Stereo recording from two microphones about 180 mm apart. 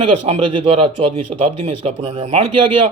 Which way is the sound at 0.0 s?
30° right (ahead or behind).